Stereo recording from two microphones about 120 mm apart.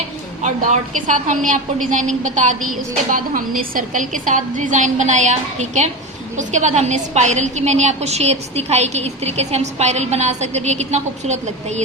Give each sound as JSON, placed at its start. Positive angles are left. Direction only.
{"t": 0.4, "sound": "a woman's voice", "side_deg": -90}
{"t": 6.3, "sound": "a woman's voice", "side_deg": -90}